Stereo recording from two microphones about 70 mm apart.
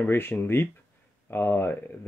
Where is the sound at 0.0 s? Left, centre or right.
Left.